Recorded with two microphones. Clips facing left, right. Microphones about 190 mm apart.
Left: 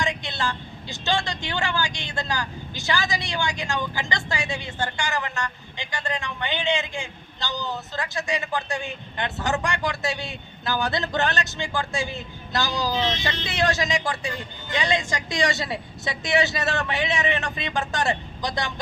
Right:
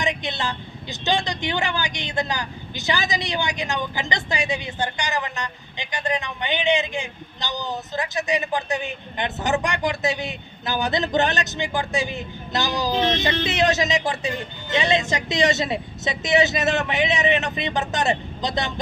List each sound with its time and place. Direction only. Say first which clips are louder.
0.0 s speech: right 2 dB; 20° right (ahead or behind)
12.9 s speech: right 4 dB; 55° right (ahead or behind)
13.4 s speech: right 1 dB; 20° right (ahead or behind)